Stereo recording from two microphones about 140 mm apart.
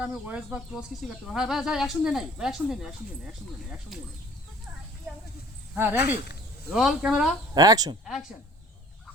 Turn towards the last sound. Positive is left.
turn(degrees=-25)  # may be behind; listen again after turning